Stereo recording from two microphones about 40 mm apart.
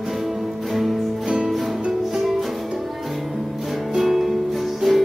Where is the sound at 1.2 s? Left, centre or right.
Centre.